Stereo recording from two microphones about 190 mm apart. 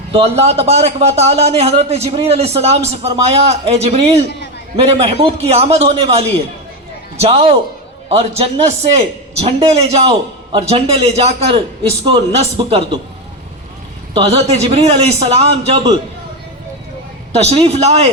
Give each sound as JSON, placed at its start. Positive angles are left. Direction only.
{"t": 0.1, "sound": "a man's voice", "side_deg": -30}
{"t": 14.1, "sound": "a man's voice", "side_deg": -35}
{"t": 17.3, "sound": "a man's voice", "side_deg": -35}